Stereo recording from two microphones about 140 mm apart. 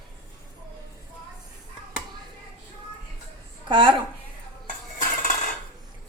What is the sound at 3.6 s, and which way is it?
Speech, 35° right (ahead or behind).